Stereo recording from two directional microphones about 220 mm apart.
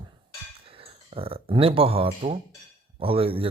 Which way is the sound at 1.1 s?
25° right (ahead or behind).